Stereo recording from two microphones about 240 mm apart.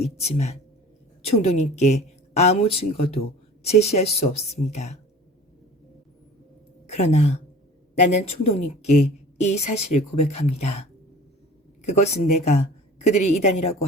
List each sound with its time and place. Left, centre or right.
0.0 s a woman's voice: left
6.8 s a woman's voice: left